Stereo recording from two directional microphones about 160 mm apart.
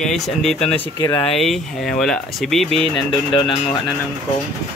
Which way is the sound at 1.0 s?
30° left (ahead or behind).